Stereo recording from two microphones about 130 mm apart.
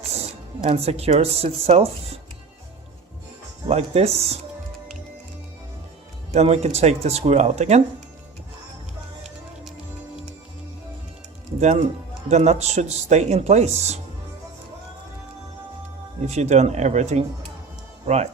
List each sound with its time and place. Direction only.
0.1 s speech: 50° right (ahead or behind)
3.7 s speech: 55° right (ahead or behind)
6.3 s speech: 55° right (ahead or behind)
11.6 s speech: 60° right (ahead or behind)
16.2 s speech: 60° right (ahead or behind)